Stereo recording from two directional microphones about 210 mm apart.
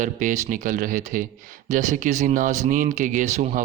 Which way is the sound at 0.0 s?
40° right (ahead or behind).